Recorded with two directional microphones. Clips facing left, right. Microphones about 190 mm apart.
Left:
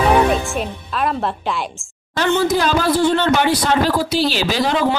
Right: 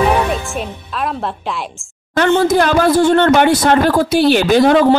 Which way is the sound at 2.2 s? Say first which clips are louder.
Right 5 dB; 55° right (ahead or behind).